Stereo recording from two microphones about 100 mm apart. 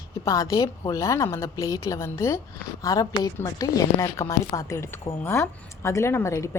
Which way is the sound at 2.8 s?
40° left (ahead or behind).